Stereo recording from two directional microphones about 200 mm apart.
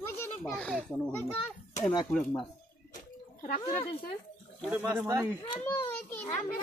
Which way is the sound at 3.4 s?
40° left (ahead or behind).